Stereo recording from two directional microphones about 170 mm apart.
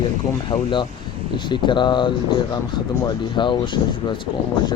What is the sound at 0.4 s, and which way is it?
Speech, 30° left (ahead or behind).